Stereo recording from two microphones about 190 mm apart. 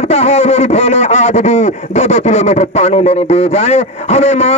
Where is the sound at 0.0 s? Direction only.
35° left (ahead or behind).